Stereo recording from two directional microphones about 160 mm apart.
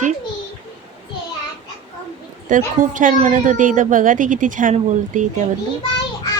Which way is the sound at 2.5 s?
55° right (ahead or behind).